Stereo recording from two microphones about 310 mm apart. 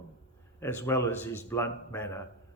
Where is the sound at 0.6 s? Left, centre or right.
Centre.